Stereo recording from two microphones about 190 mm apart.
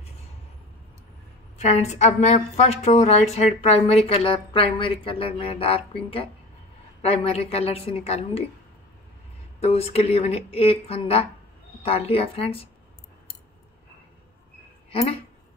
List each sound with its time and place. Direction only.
1.6 s a woman's voice: 35° left (ahead or behind)
9.6 s a woman's voice: 35° left (ahead or behind)
14.9 s speech: 30° left (ahead or behind)